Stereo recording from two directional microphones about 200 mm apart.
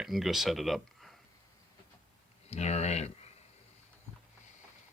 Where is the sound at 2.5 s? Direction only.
35° left (ahead or behind).